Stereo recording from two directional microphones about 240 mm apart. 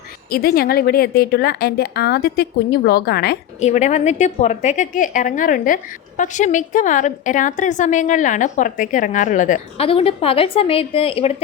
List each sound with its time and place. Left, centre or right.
0.3 s a woman's voice: left
3.6 s a woman's voice: left